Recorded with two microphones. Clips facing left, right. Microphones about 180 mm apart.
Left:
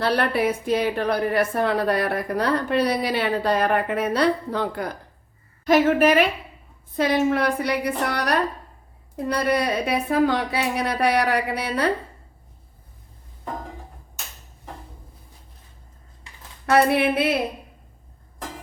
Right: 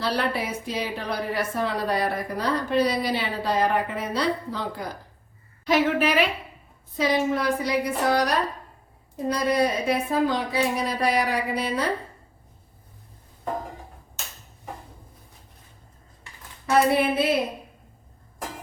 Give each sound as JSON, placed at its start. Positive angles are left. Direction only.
{"t": 0.0, "sound": "a woman's voice", "side_deg": 60}
{"t": 5.6, "sound": "a woman's voice", "side_deg": 45}
{"t": 16.6, "sound": "a woman's voice", "side_deg": 65}